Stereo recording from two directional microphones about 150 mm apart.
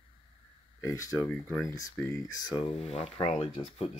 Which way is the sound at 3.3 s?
50° left (ahead or behind).